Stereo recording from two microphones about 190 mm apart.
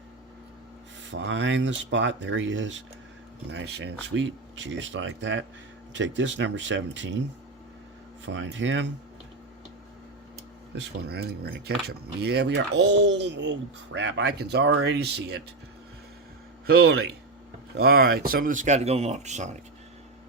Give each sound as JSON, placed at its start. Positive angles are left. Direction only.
{"t": 1.1, "sound": "speech", "side_deg": -75}
{"t": 3.5, "sound": "speech", "side_deg": -65}
{"t": 8.2, "sound": "speech", "side_deg": -75}
{"t": 10.8, "sound": "speech", "side_deg": -60}
{"t": 16.6, "sound": "speech", "side_deg": -55}